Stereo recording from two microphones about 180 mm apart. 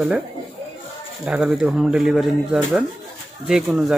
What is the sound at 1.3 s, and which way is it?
Speech, 5° right (ahead or behind).